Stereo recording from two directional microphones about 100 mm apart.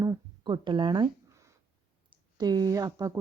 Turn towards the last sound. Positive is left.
turn(degrees=-40)  # may be behind; listen again after turning